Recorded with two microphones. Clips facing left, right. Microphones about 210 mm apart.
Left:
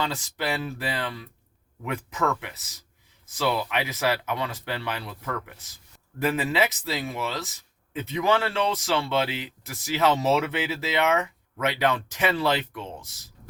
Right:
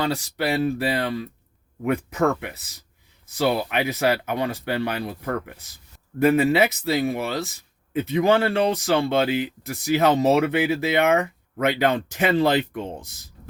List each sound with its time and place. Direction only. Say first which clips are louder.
0.0 s speech: right 5 dB; 45° right (ahead or behind)
2.3 s speech: right 4 dB; 40° right (ahead or behind); by 11.3 s 55° right (ahead or behind)
12.3 s speech: right 8 dB; 45° right (ahead or behind)